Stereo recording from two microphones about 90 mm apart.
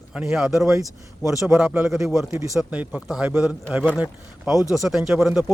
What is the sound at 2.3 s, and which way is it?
Speech, 35° right (ahead or behind).